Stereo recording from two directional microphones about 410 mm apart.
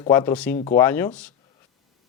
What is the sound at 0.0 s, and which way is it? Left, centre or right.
A man's voice, centre.